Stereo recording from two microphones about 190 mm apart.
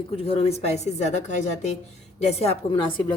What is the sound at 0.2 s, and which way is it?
A woman's voice, 30° left (ahead or behind).